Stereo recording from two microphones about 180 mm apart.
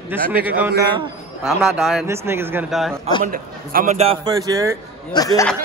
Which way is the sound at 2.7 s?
Centre (ahead or behind).